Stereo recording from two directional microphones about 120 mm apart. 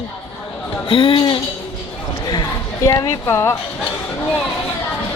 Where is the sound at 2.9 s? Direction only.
25° left (ahead or behind).